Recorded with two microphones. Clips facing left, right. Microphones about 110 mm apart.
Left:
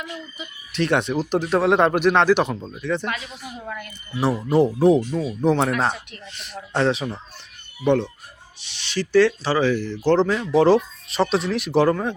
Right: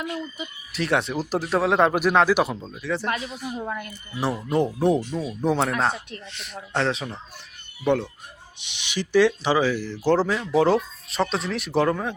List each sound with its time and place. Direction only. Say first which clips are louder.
0.3 s speech: left 4 dB; 5° right (ahead or behind)
2.6 s speech: left 3 dB; 5° left (ahead or behind)
2.8 s speech: left 1 dB; 5° right (ahead or behind)
8.5 s speech: left 3 dB; 15° right (ahead or behind); by 12.1 s centre (ahead or behind)